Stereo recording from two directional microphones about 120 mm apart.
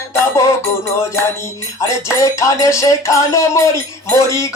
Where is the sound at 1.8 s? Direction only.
25° left (ahead or behind).